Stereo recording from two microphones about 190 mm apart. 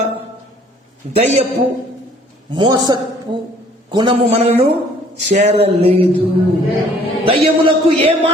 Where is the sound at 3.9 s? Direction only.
25° right (ahead or behind).